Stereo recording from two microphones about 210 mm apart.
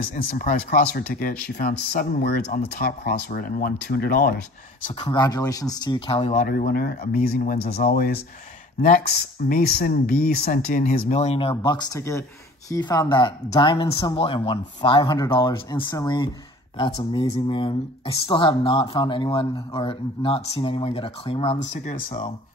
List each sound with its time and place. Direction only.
0.1 s speech: 40° left (ahead or behind)
2.4 s speech: 30° left (ahead or behind)
2.8 s speech: 50° left (ahead or behind)
5.0 s speech: 20° left (ahead or behind)